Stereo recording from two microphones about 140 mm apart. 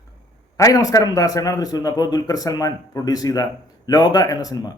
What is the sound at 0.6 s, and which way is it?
A man's voice, 25° left (ahead or behind).